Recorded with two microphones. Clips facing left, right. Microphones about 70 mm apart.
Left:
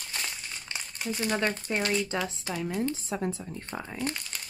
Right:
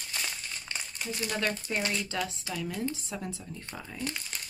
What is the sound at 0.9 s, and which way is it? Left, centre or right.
Speech, left.